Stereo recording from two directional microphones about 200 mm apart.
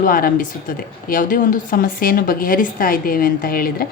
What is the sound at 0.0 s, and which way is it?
A woman's voice, 45° left (ahead or behind).